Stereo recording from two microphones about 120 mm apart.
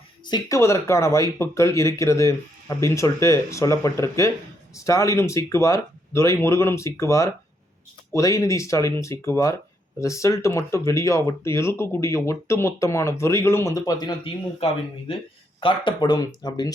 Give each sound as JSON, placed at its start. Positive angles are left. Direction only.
{"t": 0.3, "sound": "speech", "side_deg": 30}
{"t": 15.6, "sound": "speech", "side_deg": 45}